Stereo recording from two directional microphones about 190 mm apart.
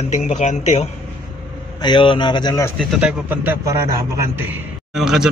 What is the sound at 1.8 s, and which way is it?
Speech, 25° left (ahead or behind).